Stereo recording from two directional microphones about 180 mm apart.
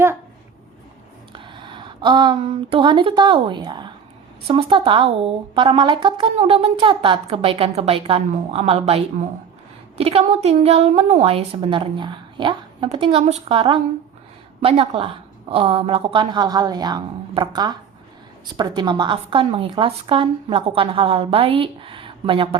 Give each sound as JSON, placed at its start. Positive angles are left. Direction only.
{"t": 1.3, "sound": "a woman's voice", "side_deg": -25}